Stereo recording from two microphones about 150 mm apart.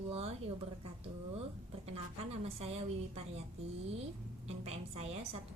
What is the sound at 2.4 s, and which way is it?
A woman's voice, 45° right (ahead or behind).